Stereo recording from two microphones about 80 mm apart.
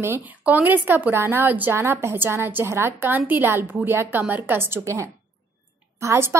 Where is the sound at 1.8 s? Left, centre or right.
Right.